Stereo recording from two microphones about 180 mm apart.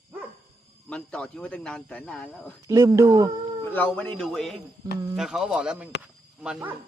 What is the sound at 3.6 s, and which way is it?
Speech, 10° left (ahead or behind).